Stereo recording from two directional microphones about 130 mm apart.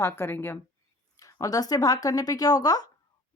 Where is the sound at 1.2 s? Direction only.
25° left (ahead or behind).